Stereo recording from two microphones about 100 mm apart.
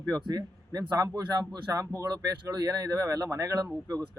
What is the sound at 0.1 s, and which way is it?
A man's voice, 40° right (ahead or behind).